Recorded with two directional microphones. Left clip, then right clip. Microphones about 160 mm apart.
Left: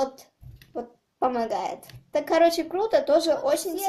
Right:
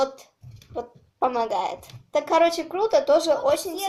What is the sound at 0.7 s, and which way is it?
Speech, 30° left (ahead or behind).